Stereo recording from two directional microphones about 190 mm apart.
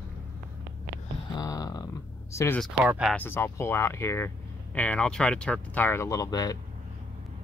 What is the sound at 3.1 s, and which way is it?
Speech, 10° left (ahead or behind).